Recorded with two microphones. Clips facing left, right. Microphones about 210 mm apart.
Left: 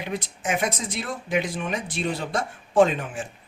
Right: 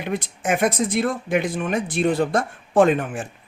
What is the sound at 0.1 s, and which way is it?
Speech, 55° right (ahead or behind).